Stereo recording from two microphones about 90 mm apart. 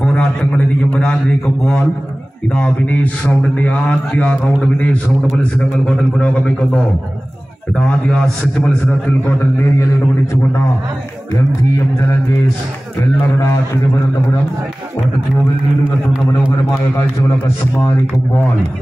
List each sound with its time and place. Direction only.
0.0 s a man's voice: 10° left (ahead or behind)
8.8 s a man's voice: 25° left (ahead or behind)